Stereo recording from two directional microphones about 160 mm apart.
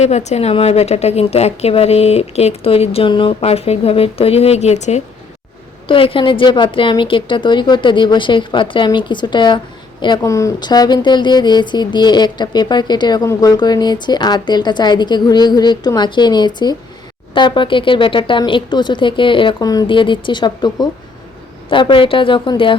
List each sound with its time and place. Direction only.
0.0 s a woman's voice: 45° left (ahead or behind)
5.9 s a woman's voice: 35° left (ahead or behind)